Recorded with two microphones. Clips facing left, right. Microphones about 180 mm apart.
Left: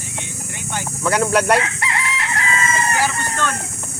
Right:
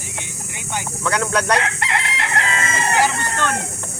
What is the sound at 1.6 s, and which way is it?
Chicken, 70° right (ahead or behind).